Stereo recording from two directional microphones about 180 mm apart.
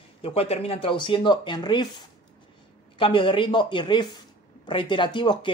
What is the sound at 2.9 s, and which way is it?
Speech, 30° left (ahead or behind).